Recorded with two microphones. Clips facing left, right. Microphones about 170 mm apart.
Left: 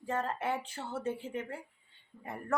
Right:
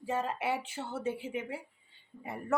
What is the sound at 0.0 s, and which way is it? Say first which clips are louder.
Speech: right 1 dB; 10° right (ahead or behind).